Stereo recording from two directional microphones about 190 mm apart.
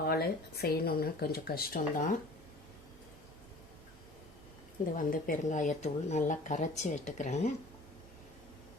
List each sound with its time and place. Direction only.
0.0 s speech: 55° left (ahead or behind)
4.9 s speech: 45° left (ahead or behind)